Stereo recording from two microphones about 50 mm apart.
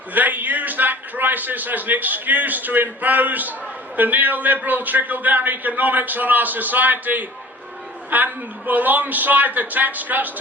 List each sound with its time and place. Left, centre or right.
0.1 s a man's voice: right